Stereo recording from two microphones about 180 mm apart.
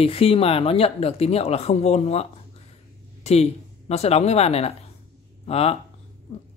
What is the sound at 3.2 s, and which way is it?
Speech, 35° left (ahead or behind).